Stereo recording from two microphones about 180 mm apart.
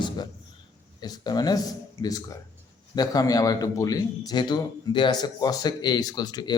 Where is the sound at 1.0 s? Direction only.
20° left (ahead or behind).